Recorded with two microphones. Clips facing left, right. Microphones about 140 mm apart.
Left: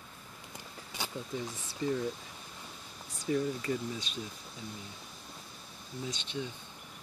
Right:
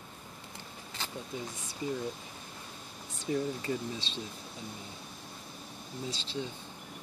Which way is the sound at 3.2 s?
25° right (ahead or behind).